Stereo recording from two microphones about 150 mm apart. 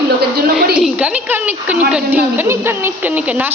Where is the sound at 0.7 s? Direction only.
5° right (ahead or behind).